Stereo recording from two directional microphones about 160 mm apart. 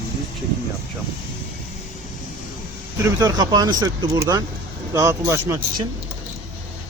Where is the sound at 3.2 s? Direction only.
25° right (ahead or behind).